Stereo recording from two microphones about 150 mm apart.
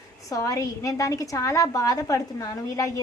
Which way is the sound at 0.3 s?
20° left (ahead or behind).